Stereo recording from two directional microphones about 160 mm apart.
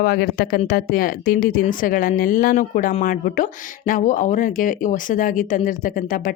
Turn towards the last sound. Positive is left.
turn(degrees=55)  # may be behind; listen again after turning